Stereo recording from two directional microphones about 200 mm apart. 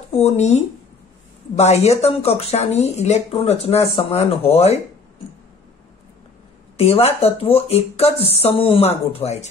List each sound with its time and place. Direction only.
0.1 s speech: 30° left (ahead or behind)
6.8 s speech: 30° left (ahead or behind)